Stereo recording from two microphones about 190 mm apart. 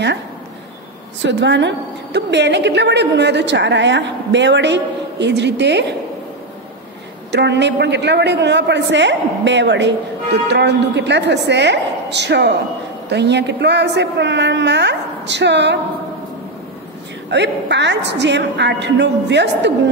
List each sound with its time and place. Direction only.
1.2 s a woman's voice: 70° right (ahead or behind)
7.2 s a woman's voice: 65° right (ahead or behind)
17.3 s a woman's voice: 65° right (ahead or behind)